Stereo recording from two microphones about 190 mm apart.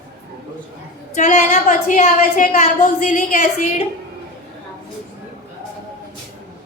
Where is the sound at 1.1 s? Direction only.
40° left (ahead or behind).